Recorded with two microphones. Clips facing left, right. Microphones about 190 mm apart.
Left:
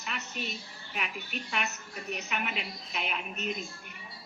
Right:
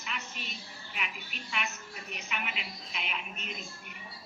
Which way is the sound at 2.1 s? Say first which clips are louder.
Left 5 dB; 45° left (ahead or behind).